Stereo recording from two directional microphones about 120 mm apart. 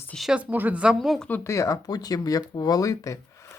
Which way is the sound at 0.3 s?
15° right (ahead or behind).